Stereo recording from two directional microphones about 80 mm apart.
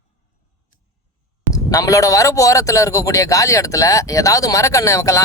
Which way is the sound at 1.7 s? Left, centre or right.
Left.